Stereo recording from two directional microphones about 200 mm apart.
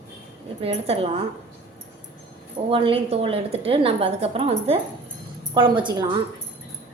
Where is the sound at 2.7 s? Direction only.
25° right (ahead or behind).